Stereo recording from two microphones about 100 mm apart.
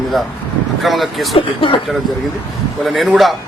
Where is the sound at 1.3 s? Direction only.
55° left (ahead or behind).